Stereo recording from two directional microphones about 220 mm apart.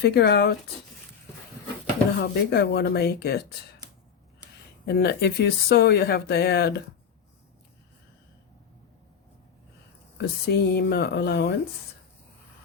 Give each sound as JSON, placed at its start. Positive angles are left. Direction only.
{"t": 0.0, "sound": "speech", "side_deg": 50}
{"t": 2.2, "sound": "speech", "side_deg": 50}
{"t": 4.9, "sound": "speech", "side_deg": 50}
{"t": 10.2, "sound": "speech", "side_deg": 50}